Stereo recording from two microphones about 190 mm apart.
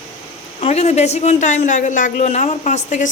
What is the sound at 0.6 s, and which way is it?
A woman's voice, 35° left (ahead or behind).